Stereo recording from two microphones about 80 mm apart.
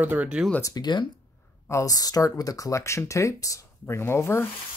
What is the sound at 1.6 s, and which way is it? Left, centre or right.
Speech, left.